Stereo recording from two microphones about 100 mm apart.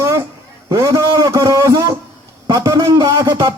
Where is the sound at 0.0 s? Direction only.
30° right (ahead or behind).